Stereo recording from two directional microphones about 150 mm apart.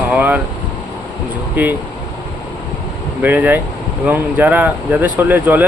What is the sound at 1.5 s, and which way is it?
Speech, 10° right (ahead or behind).